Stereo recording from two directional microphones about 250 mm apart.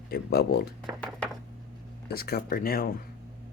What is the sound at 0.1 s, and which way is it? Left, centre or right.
Speech, left.